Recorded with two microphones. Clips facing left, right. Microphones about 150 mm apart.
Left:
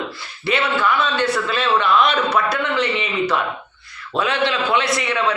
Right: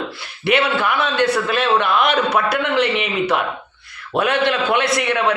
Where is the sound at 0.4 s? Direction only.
60° right (ahead or behind).